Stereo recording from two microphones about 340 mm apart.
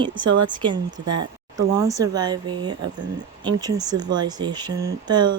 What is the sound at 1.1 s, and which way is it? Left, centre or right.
Speech, right.